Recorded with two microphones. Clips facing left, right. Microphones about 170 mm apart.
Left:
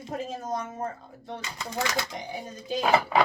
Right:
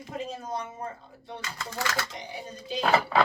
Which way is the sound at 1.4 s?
20° left (ahead or behind).